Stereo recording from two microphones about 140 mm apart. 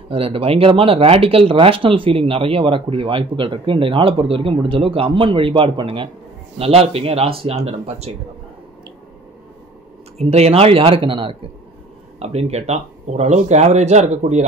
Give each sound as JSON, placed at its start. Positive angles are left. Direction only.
{"t": 0.1, "sound": "speech", "side_deg": -40}
{"t": 10.1, "sound": "speech", "side_deg": -50}
{"t": 12.2, "sound": "speech", "side_deg": -50}